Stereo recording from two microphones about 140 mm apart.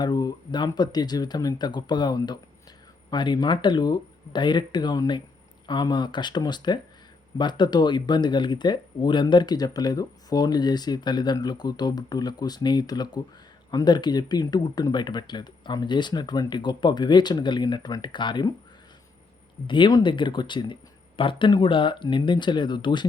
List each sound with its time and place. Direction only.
0.0 s speech: 30° left (ahead or behind)
19.6 s speech: 35° left (ahead or behind)